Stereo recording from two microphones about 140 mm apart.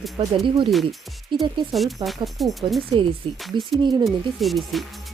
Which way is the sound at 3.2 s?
40° right (ahead or behind).